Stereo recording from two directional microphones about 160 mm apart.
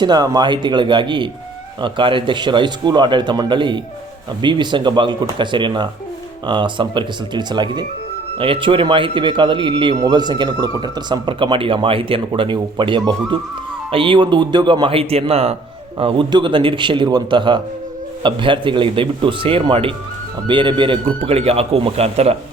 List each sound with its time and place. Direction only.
0.0 s a man's voice: 25° right (ahead or behind)